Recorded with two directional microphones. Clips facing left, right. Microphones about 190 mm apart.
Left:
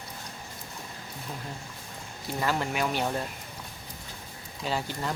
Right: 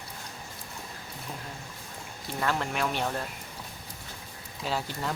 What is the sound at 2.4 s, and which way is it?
Speech, 5° left (ahead or behind).